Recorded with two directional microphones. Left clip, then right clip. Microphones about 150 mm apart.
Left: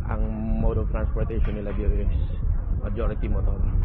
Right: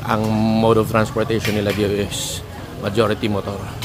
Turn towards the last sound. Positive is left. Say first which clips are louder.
# right 14 dB
turn(degrees=-45)  # may be behind; listen again after turning